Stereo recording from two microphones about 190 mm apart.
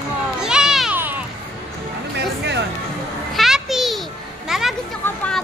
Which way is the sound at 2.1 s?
65° right (ahead or behind).